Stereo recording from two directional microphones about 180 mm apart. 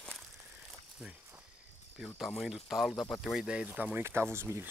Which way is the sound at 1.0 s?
10° right (ahead or behind).